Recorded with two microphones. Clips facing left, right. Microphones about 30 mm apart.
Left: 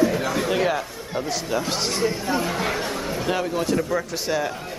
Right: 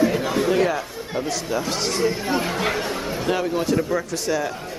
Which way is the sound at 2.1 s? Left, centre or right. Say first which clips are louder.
Right 1 dB; centre.